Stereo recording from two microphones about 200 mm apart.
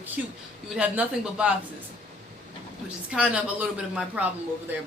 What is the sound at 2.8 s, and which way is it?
A woman's voice, 5° right (ahead or behind).